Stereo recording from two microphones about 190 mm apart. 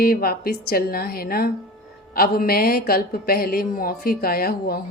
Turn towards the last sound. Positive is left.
turn(degrees=55)  # may be behind; listen again after turning